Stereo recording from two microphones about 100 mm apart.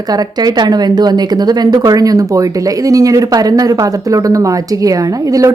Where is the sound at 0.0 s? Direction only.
40° right (ahead or behind).